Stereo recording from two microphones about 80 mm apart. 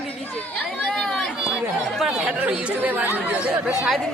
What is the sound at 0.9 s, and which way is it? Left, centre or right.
Run, centre.